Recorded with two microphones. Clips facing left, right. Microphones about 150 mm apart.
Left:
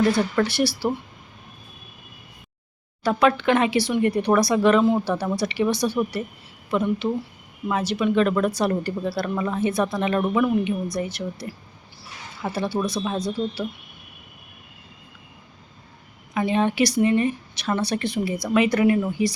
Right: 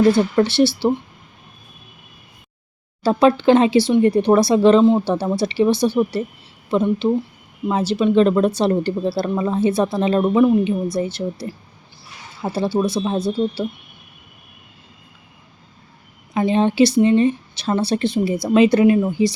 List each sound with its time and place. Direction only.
0.1 s speech: 25° right (ahead or behind)
3.0 s speech: 30° right (ahead or behind)
16.3 s speech: 30° right (ahead or behind)